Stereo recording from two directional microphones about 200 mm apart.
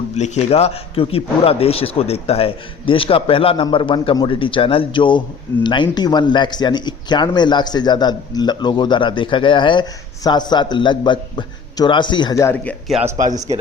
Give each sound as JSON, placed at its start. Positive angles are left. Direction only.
{"t": 0.2, "sound": "speech", "side_deg": 30}
{"t": 12.9, "sound": "speech", "side_deg": -5}